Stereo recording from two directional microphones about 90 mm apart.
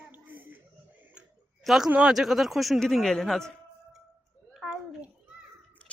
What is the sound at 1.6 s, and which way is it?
Speech, 5° right (ahead or behind).